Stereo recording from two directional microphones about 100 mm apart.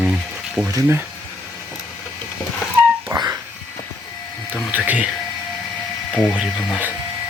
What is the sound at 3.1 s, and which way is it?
Wheeze, 40° right (ahead or behind).